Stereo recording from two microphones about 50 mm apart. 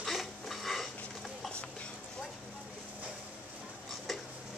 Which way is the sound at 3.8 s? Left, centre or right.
Centre.